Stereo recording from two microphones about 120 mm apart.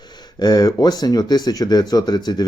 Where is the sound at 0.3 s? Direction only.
35° left (ahead or behind).